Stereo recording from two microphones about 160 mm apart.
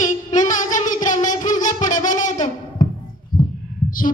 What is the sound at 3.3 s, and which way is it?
Heart sounds, 60° left (ahead or behind).